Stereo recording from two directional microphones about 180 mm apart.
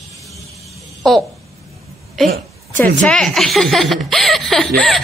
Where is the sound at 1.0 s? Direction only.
Centre (ahead or behind).